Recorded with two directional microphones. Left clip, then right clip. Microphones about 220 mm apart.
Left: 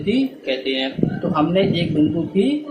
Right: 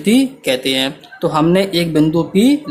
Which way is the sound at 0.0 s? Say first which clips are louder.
Right 6 dB; 45° right (ahead or behind).